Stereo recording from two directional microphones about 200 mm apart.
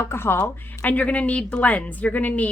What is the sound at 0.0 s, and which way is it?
Speech, 10° left (ahead or behind).